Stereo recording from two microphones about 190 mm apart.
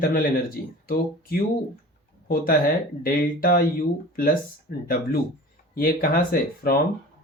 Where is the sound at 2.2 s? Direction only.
50° left (ahead or behind).